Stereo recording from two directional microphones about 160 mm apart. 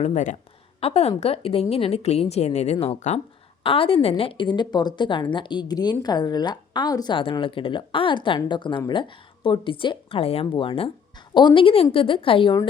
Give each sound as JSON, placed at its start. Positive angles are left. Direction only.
{"t": 0.0, "sound": "a woman's voice", "side_deg": 50}